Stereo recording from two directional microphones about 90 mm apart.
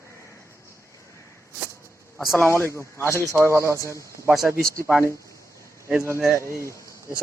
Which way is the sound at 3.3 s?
30° right (ahead or behind).